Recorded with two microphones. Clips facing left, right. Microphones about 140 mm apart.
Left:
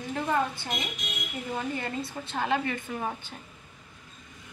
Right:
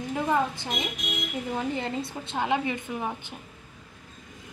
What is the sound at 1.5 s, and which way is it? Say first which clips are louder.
A woman's voice: right 2 dB; 20° right (ahead or behind).